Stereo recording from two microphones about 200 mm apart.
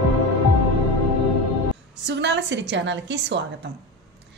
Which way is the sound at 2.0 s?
60° right (ahead or behind).